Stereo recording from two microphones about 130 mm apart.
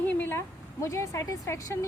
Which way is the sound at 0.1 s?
15° left (ahead or behind).